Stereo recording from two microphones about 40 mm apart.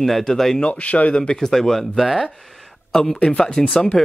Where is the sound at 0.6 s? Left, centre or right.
Left.